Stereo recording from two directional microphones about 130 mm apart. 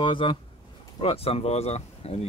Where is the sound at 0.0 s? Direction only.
40° left (ahead or behind).